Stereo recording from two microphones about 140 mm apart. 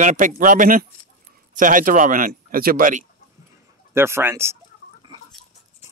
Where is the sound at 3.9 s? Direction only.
15° right (ahead or behind).